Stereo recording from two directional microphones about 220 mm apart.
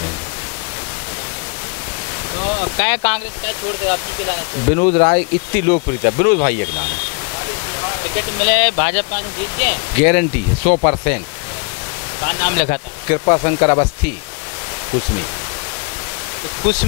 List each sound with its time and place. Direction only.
2.3 s a sound: 15° left (ahead or behind)
2.8 s speech: 10° left (ahead or behind)
8.1 s speech: 15° left (ahead or behind)
12.2 s speech: 15° left (ahead or behind)
16.6 s speech: 10° left (ahead or behind)